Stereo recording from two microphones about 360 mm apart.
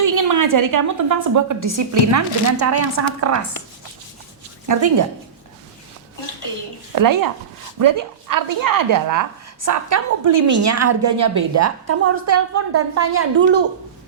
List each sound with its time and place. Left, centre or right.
0.0 s a sound: right
0.5 s a woman's voice: right
4.7 s a woman's voice: right
6.9 s a woman's voice: right